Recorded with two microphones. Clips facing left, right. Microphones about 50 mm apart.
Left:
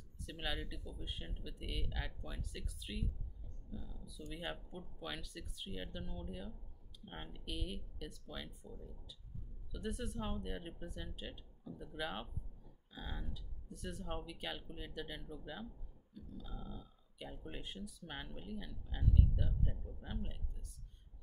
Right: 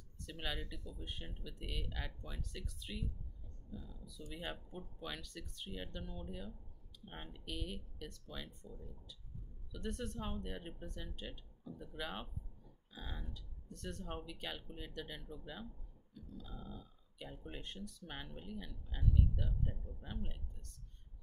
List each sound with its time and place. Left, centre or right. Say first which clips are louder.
0.2 s speech: left 1 dB; centre